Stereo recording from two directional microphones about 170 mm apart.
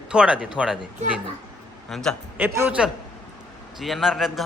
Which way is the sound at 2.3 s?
10° right (ahead or behind).